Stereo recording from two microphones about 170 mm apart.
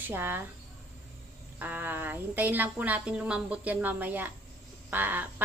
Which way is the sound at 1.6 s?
10° right (ahead or behind).